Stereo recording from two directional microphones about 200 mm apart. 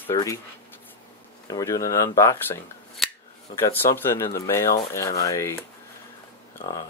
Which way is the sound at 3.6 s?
10° left (ahead or behind).